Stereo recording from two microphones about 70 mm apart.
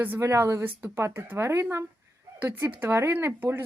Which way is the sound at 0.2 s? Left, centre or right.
Right.